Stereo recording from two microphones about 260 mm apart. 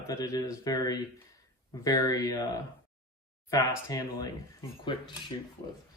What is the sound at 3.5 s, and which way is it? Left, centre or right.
Speech, centre.